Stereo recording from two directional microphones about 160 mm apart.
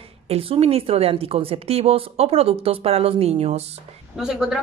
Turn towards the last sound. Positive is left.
turn(degrees=-5)  # may be behind; listen again after turning